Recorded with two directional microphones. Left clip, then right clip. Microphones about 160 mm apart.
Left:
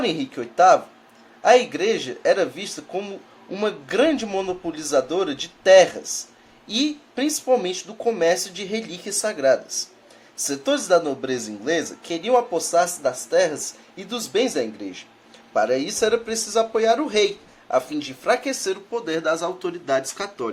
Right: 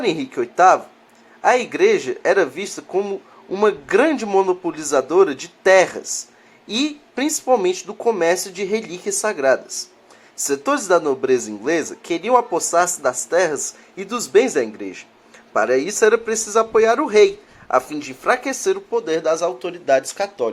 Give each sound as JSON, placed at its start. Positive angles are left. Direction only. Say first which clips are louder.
{"t": 0.0, "sound": "a man's voice", "louder": "right 4 dB", "side_deg": -20}